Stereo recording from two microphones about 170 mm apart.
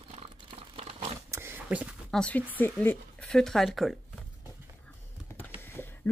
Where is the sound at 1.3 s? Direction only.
15° right (ahead or behind).